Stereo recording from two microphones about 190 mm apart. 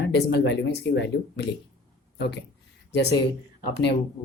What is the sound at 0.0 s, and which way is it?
Speech, 65° left (ahead or behind).